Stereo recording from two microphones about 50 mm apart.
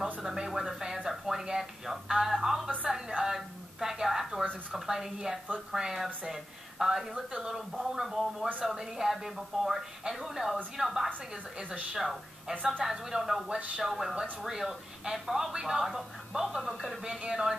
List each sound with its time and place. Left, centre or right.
0.0 s speech: centre
0.9 s a sound: centre
2.2 s telephone: centre
2.9 s a sound: centre
4.7 s a woman's voice: centre
17.2 s speech: centre